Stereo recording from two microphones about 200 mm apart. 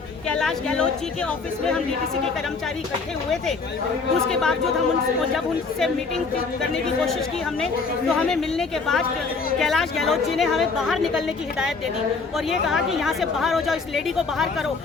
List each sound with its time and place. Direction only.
0.3 s speech: 5° left (ahead or behind)
4.3 s speech: 5° left (ahead or behind)
5.8 s speech: centre (ahead or behind)
8.1 s speech: centre (ahead or behind)
12.5 s speech: centre (ahead or behind)